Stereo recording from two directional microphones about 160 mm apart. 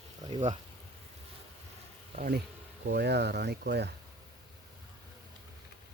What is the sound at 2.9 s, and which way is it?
Speech, 90° right.